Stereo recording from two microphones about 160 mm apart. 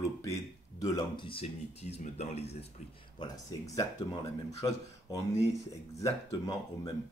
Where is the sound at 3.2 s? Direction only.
25° left (ahead or behind).